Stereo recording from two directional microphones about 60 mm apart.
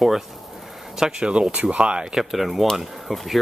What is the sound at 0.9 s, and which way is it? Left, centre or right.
Speech, centre.